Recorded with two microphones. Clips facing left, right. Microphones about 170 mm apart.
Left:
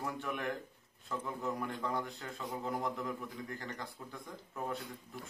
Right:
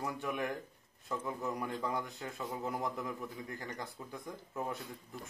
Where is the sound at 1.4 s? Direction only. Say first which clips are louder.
Even; 5° right (ahead or behind).